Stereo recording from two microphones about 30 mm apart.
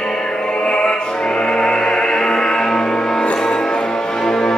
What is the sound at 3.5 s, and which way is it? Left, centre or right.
Music, left.